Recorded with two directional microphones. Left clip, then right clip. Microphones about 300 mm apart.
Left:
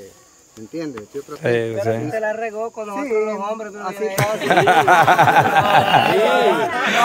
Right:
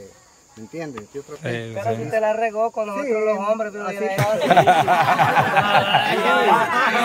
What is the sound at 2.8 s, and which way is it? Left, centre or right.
Speech, centre.